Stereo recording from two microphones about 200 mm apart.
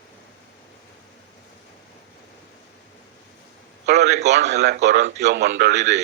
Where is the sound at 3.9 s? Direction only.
55° right (ahead or behind).